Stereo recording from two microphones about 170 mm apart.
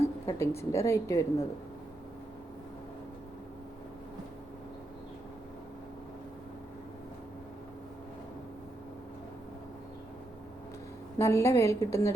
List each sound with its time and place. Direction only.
0.3 s a woman's voice: 15° left (ahead or behind)
11.2 s a woman's voice: 15° left (ahead or behind)